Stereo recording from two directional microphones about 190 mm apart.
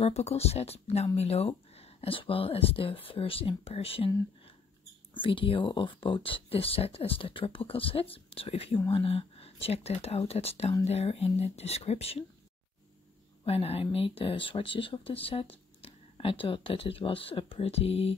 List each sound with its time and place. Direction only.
0.0 s speech: 35° left (ahead or behind)
5.1 s speech: 25° left (ahead or behind)
13.4 s speech: 30° left (ahead or behind)